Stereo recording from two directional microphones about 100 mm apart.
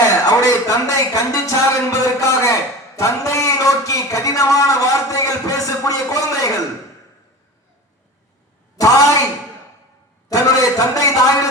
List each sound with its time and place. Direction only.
0.0 s speech: 35° left (ahead or behind)
8.7 s a sound: 35° left (ahead or behind)
10.2 s a man's voice: 35° left (ahead or behind)